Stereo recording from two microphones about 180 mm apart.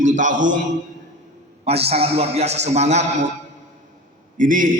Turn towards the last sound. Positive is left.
turn(degrees=-50)  # may be behind; listen again after turning